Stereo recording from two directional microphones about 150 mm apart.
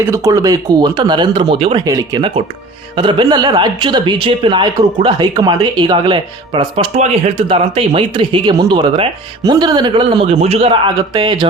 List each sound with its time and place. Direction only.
0.0 s speech: 20° right (ahead or behind); by 1.8 s 35° right (ahead or behind)
1.8 s speech: 25° right (ahead or behind)